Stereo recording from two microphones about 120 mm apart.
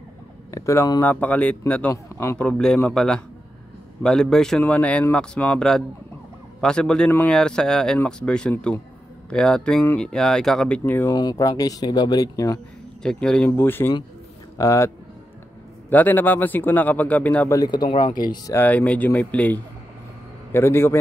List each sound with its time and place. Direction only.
0.5 s speech: 25° left (ahead or behind)
1.0 s a man's voice: 15° left (ahead or behind)
2.0 s a sound: 25° left (ahead or behind)
2.3 s a man's voice: 10° left (ahead or behind)
7.3 s a man's voice: 5° left (ahead or behind)
11.1 s speech: 35° left (ahead or behind)
13.0 s a man's voice: 5° left (ahead or behind)
13.5 s speech: 20° left (ahead or behind)
15.9 s a man's voice: 15° left (ahead or behind)
17.5 s speech: 35° left (ahead or behind)
18.5 s a man's voice: 15° left (ahead or behind)